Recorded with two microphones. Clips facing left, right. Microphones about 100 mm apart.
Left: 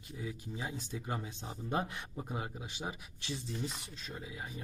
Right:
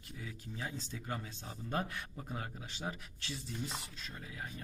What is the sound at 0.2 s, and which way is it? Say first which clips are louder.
Speech: left 3 dB; 15° left (ahead or behind).